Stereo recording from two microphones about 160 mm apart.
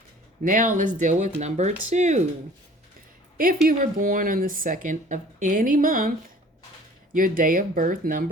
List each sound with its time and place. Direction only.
0.4 s speech: 55° right (ahead or behind)
3.3 s speech: 60° right (ahead or behind)